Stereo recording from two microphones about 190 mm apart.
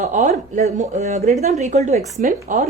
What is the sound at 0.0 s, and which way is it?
A woman's voice, 40° right (ahead or behind).